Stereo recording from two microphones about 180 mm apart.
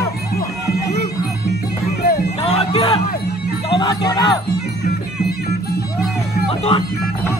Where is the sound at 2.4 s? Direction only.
35° left (ahead or behind).